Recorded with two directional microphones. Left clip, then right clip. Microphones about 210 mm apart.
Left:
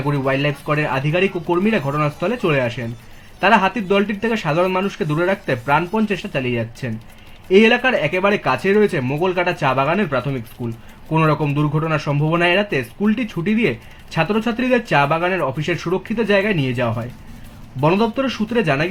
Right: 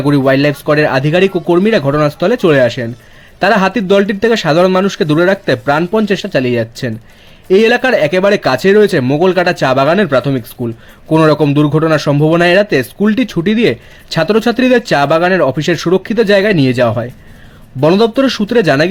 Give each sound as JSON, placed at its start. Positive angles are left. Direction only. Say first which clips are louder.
{"t": 0.0, "sound": "speech", "louder": "right 9 dB", "side_deg": -50}